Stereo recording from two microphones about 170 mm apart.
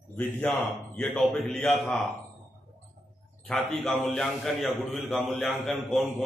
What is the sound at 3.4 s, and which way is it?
A man's voice, centre (ahead or behind).